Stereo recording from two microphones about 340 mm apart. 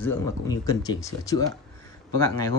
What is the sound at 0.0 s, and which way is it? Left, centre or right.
Speech, centre.